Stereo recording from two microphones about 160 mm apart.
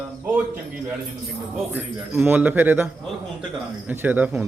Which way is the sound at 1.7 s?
10° right (ahead or behind).